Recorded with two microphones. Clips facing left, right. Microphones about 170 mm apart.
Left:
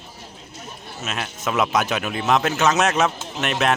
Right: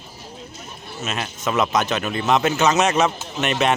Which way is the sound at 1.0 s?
Centre (ahead or behind).